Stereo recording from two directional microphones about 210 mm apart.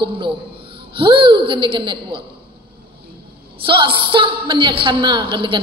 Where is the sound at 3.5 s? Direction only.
25° right (ahead or behind).